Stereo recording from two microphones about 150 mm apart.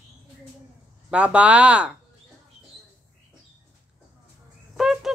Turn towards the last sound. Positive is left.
turn(degrees=0)  # may be behind; listen again after turning